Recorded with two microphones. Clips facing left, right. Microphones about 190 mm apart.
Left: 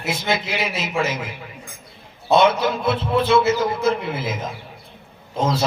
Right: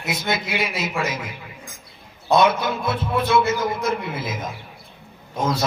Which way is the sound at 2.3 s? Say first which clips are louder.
Left 2 dB; 25° left (ahead or behind).